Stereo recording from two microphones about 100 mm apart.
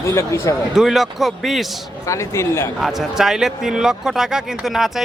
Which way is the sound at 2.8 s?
5° right (ahead or behind).